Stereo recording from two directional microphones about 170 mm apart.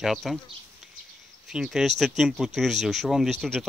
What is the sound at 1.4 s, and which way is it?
Speech, centre (ahead or behind).